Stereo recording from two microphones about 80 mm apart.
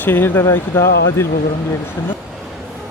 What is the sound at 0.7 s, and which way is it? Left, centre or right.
Speech, left.